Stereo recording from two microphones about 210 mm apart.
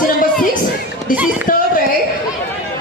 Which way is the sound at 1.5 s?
40° left (ahead or behind).